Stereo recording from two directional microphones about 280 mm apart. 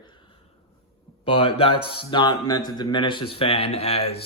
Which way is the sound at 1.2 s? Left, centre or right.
Centre.